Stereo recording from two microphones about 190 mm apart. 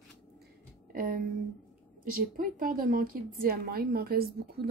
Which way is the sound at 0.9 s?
50° right (ahead or behind).